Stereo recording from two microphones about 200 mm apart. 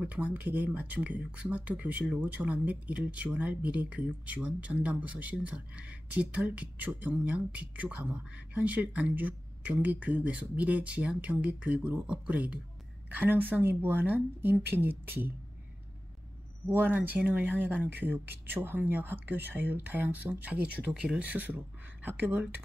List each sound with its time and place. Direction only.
0.0 s speech: 5° right (ahead or behind)
16.6 s speech: 10° right (ahead or behind)